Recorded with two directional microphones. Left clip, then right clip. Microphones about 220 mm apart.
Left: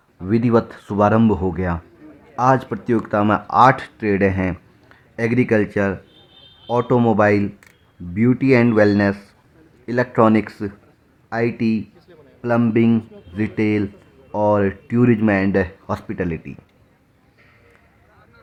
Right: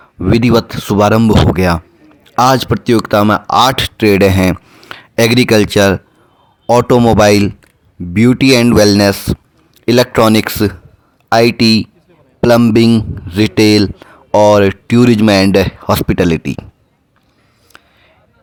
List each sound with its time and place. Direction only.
0.3 s speech: 35° right (ahead or behind)